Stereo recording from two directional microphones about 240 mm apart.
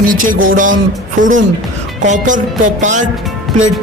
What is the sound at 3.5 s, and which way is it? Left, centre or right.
Speech, centre.